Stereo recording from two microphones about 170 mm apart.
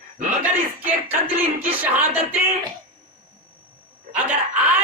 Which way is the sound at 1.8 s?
10° right (ahead or behind).